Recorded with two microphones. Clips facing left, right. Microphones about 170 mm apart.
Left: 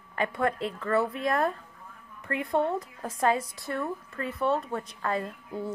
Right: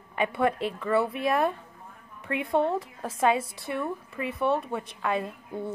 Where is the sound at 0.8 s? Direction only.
5° right (ahead or behind).